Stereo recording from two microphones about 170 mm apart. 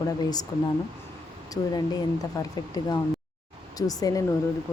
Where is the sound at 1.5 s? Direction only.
25° left (ahead or behind).